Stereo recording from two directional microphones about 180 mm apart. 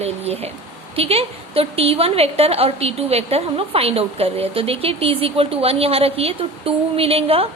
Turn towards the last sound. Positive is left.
turn(degrees=-30)  # may be behind; listen again after turning